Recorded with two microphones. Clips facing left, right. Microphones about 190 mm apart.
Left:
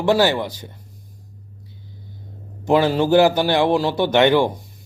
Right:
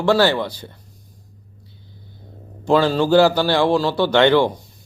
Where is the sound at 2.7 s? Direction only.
20° left (ahead or behind).